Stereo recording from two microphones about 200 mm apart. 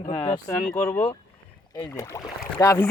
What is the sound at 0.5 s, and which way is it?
Speech, 10° left (ahead or behind).